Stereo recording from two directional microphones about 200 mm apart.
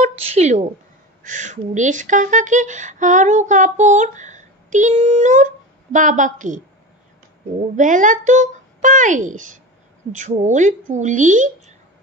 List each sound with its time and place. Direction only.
0.0 s a sound: 35° right (ahead or behind)
1.2 s speech: 40° right (ahead or behind)
7.7 s speech: 40° right (ahead or behind)